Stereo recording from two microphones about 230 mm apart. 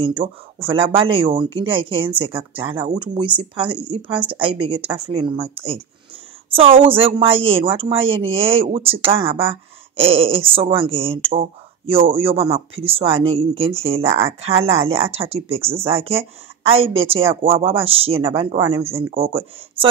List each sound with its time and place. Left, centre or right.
0.0 s speech: right